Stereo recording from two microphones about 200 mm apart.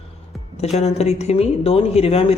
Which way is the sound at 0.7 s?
30° left (ahead or behind).